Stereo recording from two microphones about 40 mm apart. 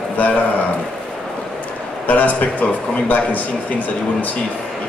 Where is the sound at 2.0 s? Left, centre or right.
Left.